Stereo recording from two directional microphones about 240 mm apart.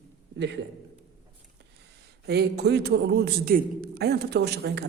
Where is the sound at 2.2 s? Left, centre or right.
Right.